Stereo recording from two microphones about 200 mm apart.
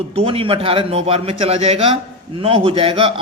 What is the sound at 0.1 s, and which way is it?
A man's voice, 30° right (ahead or behind).